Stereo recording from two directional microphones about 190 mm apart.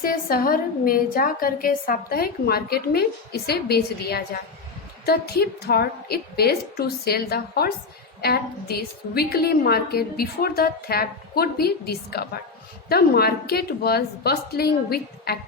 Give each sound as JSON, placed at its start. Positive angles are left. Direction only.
{"t": 0.0, "sound": "a woman's voice", "side_deg": 50}